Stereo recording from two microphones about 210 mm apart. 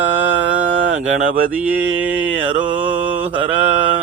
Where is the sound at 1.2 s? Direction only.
40° right (ahead or behind).